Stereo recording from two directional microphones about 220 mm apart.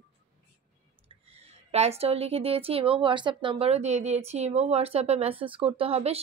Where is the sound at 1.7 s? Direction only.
30° right (ahead or behind).